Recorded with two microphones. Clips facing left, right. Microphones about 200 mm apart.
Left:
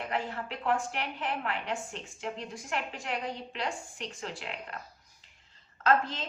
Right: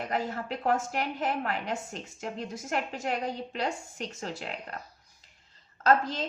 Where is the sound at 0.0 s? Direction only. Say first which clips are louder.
Right 2 dB; 40° right (ahead or behind).